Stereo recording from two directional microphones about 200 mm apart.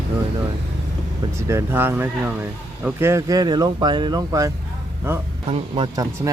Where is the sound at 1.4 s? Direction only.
15° right (ahead or behind).